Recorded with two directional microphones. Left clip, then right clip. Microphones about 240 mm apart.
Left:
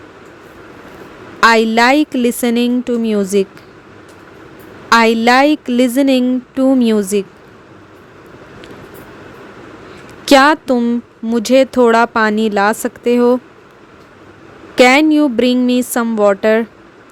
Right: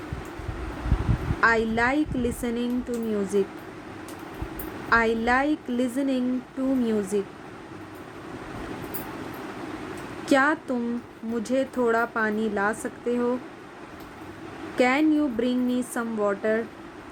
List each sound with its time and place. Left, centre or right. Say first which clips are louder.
1.4 s speech: left 12 dB; left
4.9 s speech: left 12 dB; left
10.2 s speech: left 13 dB; left
14.8 s speech: left 13 dB; left